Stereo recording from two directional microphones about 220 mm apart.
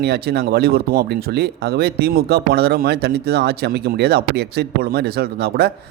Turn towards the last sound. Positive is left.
turn(degrees=-45)  # may be behind; listen again after turning